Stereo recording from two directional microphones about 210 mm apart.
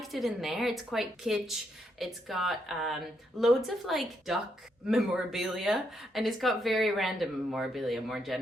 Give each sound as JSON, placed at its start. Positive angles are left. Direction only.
{"t": 0.0, "sound": "speech", "side_deg": 0}